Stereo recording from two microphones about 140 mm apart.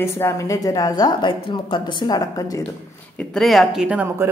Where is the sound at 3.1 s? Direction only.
Centre (ahead or behind).